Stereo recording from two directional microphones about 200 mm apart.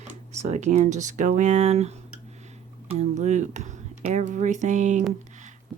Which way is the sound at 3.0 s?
35° right (ahead or behind).